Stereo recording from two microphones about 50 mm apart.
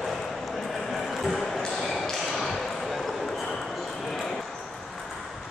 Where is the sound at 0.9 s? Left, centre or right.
Centre.